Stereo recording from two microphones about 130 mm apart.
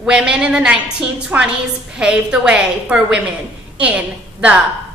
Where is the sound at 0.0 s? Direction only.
5° right (ahead or behind).